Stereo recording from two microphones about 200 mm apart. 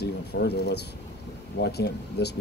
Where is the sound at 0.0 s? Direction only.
55° left (ahead or behind).